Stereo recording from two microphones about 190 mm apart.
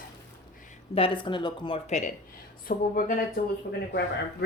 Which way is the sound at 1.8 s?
40° left (ahead or behind).